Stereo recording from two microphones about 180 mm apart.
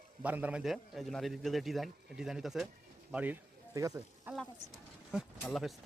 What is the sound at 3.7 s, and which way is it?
Speech, 20° right (ahead or behind).